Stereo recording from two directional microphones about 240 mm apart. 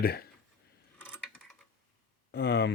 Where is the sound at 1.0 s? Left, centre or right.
Centre.